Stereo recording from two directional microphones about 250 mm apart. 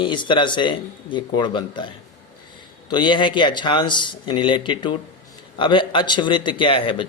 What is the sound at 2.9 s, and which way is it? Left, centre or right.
A man's voice, centre.